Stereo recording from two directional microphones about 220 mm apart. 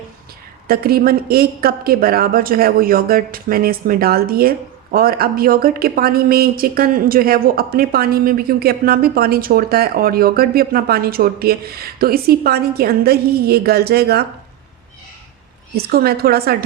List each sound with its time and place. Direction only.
0.7 s a woman's voice: 45° right (ahead or behind)
15.7 s a woman's voice: 45° right (ahead or behind)